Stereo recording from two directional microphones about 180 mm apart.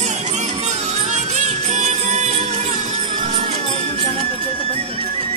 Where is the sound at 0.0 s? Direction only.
40° right (ahead or behind).